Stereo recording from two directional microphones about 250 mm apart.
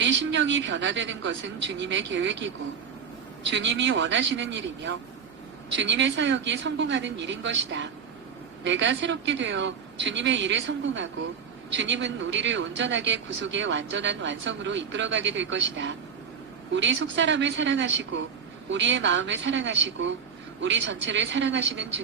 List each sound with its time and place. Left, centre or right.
0.0 s speech: right